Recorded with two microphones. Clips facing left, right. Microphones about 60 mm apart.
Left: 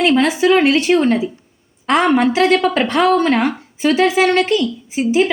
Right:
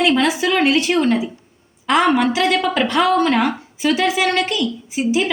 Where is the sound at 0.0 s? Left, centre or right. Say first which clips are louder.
Left 3 dB; left.